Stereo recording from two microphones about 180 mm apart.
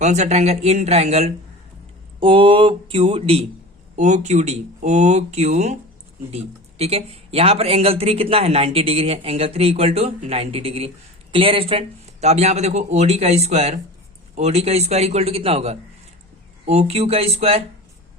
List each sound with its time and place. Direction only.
0.0 s speech: 40° right (ahead or behind)
2.2 s a sound: 30° right (ahead or behind)
3.9 s speech: 40° right (ahead or behind)